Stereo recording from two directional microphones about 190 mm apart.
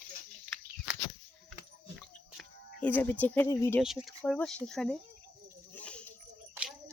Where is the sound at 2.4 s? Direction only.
10° left (ahead or behind).